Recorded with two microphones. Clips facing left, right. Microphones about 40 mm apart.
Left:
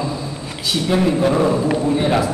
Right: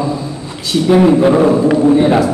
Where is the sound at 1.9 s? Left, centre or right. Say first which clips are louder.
Right 7 dB; centre.